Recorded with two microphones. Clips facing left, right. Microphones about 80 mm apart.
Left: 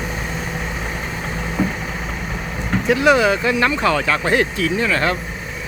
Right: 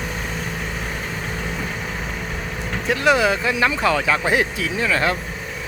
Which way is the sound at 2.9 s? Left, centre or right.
Centre.